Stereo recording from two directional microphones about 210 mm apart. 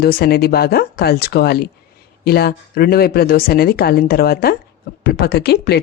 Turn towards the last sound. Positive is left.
turn(degrees=50)  # may be behind; listen again after turning